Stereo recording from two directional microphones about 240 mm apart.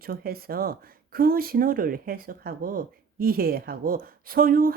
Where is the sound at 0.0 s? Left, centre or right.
Right.